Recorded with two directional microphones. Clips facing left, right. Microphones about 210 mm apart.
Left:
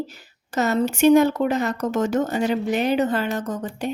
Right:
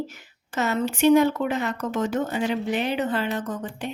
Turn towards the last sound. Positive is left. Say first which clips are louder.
# left 3 dB
turn(degrees=40)  # may be behind; listen again after turning